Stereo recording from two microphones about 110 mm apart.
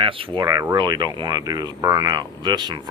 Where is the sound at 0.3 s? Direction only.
35° right (ahead or behind).